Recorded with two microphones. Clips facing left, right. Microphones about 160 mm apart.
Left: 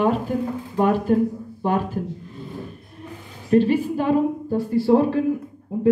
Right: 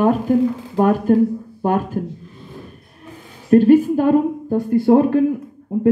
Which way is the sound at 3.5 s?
45° right (ahead or behind).